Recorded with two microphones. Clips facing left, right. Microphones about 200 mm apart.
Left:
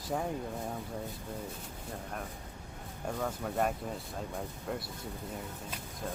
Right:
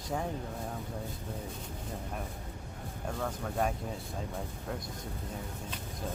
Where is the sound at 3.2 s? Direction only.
5° left (ahead or behind).